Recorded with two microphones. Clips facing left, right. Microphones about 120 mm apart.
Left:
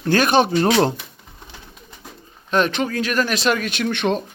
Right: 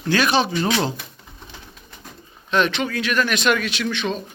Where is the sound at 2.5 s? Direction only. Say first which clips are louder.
Left 1 dB; 40° left (ahead or behind).